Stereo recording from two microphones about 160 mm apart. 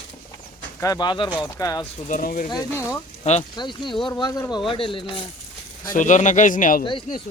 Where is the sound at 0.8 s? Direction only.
25° left (ahead or behind).